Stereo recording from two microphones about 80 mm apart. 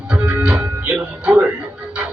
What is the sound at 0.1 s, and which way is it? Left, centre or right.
Music, centre.